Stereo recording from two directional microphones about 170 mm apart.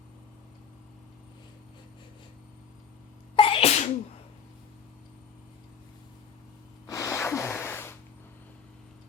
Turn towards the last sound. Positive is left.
turn(degrees=15)  # may be behind; listen again after turning